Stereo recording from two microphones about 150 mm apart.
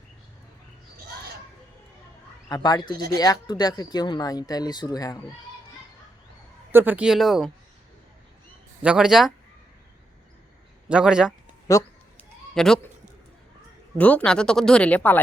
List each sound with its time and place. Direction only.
2.5 s speech: 25° left (ahead or behind)
6.7 s speech: 15° right (ahead or behind)
8.8 s speech: 5° right (ahead or behind)
10.8 s speech: 5° right (ahead or behind)
11.7 s speech: 20° left (ahead or behind)
12.5 s speech: 5° left (ahead or behind)
14.0 s speech: 10° left (ahead or behind)